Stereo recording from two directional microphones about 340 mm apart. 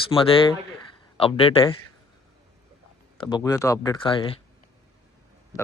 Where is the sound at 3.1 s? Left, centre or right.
Centre.